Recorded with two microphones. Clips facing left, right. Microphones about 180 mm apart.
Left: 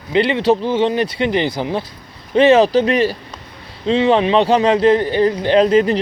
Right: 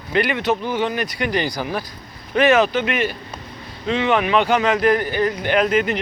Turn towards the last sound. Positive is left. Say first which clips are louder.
# left 6 dB
turn(degrees=35)  # may be behind; listen again after turning